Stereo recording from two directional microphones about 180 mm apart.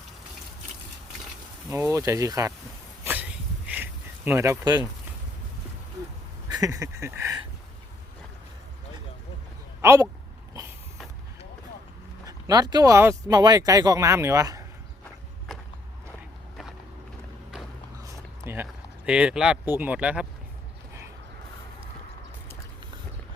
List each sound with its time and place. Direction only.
1.7 s speech: 15° right (ahead or behind)
3.0 s a sound: 10° right (ahead or behind)
6.5 s speech: 20° right (ahead or behind)
9.8 s speech: 15° right (ahead or behind)
12.2 s speech: 20° right (ahead or behind)
18.0 s speech: 10° right (ahead or behind)